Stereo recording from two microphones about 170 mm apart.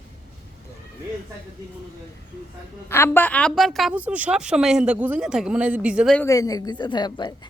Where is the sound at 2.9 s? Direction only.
15° left (ahead or behind); by 6.1 s 5° right (ahead or behind).